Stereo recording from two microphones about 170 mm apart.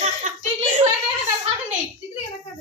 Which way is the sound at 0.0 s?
45° right (ahead or behind).